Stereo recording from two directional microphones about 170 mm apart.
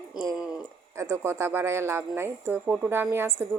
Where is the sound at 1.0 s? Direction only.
15° right (ahead or behind).